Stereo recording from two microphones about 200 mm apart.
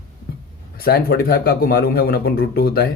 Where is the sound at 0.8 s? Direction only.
50° left (ahead or behind).